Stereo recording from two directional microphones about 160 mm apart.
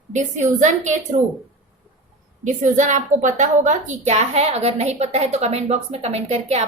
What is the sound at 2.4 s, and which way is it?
A woman's voice, 50° right (ahead or behind).